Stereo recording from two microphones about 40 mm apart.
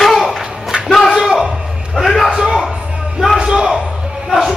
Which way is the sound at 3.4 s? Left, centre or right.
Centre.